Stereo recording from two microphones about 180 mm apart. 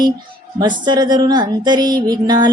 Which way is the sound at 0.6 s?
25° right (ahead or behind).